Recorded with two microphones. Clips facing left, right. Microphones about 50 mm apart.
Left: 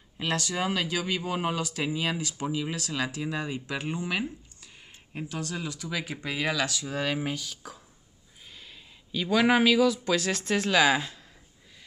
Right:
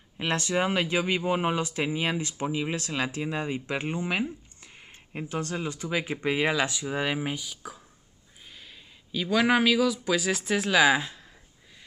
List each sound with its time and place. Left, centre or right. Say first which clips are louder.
0.2 s speech: right 3 dB; right; by 11.2 s centre